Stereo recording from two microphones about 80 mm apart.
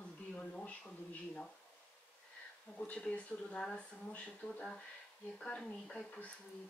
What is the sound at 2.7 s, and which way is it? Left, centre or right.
A woman's voice, centre.